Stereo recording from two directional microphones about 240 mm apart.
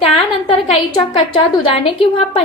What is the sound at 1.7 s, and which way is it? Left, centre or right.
Speech, left.